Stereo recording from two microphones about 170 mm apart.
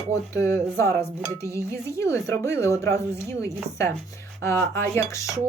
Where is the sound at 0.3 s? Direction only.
15° left (ahead or behind).